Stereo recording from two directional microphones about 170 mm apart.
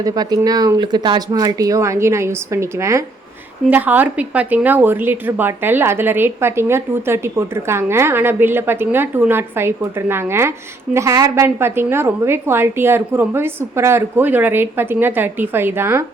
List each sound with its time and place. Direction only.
0.0 s a woman's voice: 25° right (ahead or behind)